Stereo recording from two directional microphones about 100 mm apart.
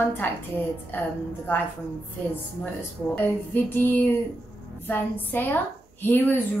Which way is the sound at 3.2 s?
20° left (ahead or behind).